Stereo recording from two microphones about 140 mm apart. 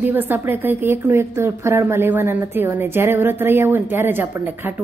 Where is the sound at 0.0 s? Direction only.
15° right (ahead or behind).